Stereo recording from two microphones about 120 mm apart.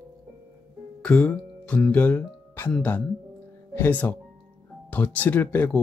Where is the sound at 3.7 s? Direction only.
15° left (ahead or behind).